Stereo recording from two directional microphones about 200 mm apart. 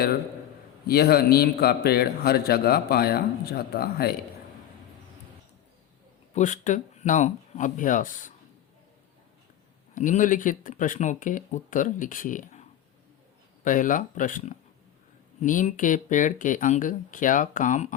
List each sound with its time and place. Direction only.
0.9 s a man's voice: 50° left (ahead or behind)
6.3 s speech: 40° left (ahead or behind)
9.9 s speech: 40° left (ahead or behind)
13.7 s speech: 40° left (ahead or behind)